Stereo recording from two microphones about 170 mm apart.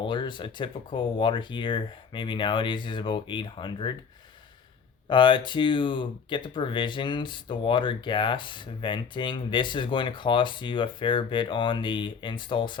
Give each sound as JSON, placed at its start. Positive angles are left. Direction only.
{"t": 0.0, "sound": "speech", "side_deg": 30}
{"t": 5.0, "sound": "speech", "side_deg": 30}